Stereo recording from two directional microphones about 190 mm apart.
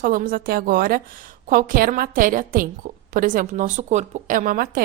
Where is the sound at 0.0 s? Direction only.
50° right (ahead or behind).